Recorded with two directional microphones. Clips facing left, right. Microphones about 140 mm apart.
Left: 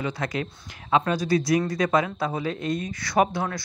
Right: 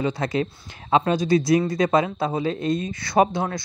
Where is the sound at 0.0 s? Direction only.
25° right (ahead or behind).